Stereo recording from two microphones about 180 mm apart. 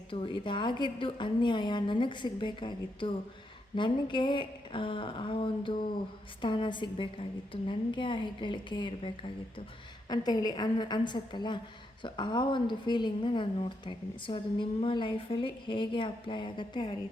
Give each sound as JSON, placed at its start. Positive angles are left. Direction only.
{"t": 0.1, "sound": "a woman's voice", "side_deg": 30}